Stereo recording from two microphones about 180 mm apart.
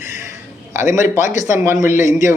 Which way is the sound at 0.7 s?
15° right (ahead or behind).